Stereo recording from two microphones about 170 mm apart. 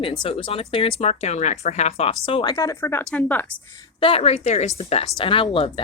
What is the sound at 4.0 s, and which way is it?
Speech, 35° left (ahead or behind).